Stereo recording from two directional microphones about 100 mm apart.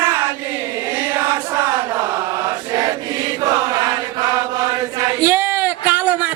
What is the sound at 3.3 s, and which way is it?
Chant, 35° right (ahead or behind).